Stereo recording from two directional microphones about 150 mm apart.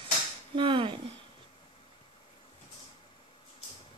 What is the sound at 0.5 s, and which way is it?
Speech, 35° right (ahead or behind).